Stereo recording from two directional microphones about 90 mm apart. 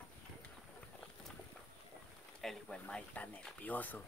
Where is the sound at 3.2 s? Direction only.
20° left (ahead or behind).